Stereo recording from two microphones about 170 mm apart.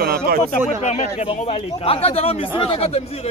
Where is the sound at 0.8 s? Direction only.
40° left (ahead or behind).